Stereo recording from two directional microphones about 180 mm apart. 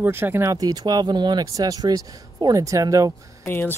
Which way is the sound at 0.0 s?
15° right (ahead or behind).